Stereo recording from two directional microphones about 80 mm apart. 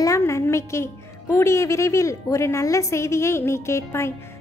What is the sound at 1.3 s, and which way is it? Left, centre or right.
A woman's voice, left.